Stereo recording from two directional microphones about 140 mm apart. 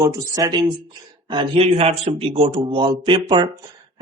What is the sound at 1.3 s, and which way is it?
Speech, 40° right (ahead or behind).